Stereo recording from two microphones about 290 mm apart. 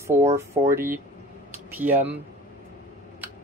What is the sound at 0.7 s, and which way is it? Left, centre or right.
Speech, centre.